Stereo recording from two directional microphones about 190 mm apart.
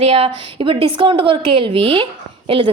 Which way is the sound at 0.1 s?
30° right (ahead or behind).